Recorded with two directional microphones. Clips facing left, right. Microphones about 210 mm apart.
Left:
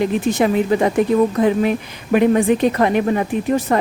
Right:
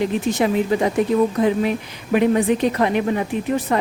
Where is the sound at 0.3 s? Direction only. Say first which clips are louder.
Left 2 dB; 55° left (ahead or behind).